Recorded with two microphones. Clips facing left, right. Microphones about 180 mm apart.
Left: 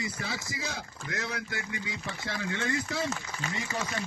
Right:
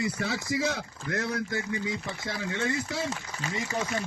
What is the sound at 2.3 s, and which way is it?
Speech, 30° right (ahead or behind).